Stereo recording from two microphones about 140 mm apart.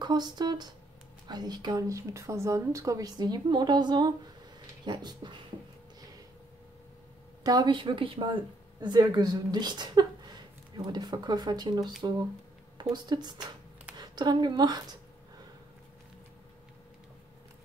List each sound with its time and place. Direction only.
0.0 s speech: 30° right (ahead or behind)
7.4 s a woman's voice: 30° right (ahead or behind)
12.9 s a woman's voice: 30° right (ahead or behind)